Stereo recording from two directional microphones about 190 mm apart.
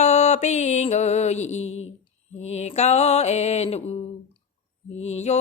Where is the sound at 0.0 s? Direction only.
35° left (ahead or behind).